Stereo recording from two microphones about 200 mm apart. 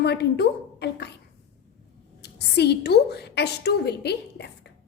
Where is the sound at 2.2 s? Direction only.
55° left (ahead or behind).